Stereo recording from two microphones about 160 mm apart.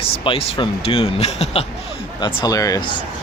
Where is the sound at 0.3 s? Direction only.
35° left (ahead or behind).